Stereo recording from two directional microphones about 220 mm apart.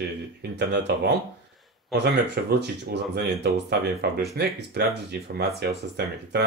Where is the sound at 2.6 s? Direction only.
50° right (ahead or behind).